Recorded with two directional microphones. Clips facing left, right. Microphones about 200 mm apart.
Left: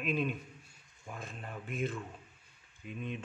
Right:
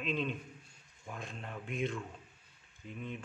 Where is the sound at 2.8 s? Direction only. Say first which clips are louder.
Left 2 dB; 20° left (ahead or behind).